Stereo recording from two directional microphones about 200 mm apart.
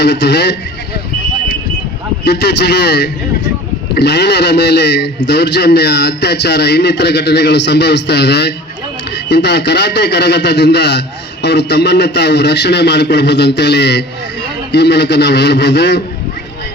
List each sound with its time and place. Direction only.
0.0 s a man's voice: 60° left (ahead or behind)
2.2 s a man's voice: 55° left (ahead or behind)